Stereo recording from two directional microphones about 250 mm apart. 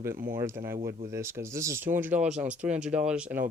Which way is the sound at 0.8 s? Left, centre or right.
Right.